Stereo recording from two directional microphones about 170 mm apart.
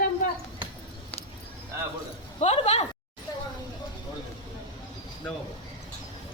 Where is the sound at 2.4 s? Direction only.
40° left (ahead or behind).